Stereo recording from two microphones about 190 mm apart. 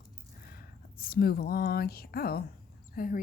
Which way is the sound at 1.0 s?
50° left (ahead or behind).